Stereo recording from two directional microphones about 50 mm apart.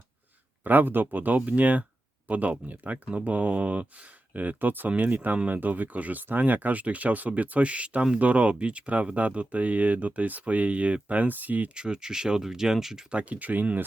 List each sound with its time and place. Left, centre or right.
0.6 s speech: right
11.7 s speech: centre
13.1 s speech: right